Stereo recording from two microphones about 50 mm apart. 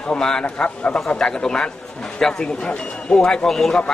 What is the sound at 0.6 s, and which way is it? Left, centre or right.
Speech, left.